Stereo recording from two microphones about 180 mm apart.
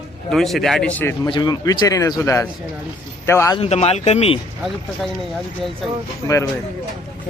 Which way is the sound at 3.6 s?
35° left (ahead or behind).